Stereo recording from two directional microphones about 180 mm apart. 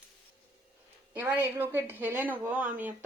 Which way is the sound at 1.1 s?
10° right (ahead or behind).